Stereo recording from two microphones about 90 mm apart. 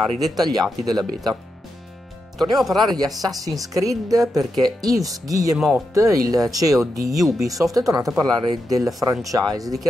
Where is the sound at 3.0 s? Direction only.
45° right (ahead or behind).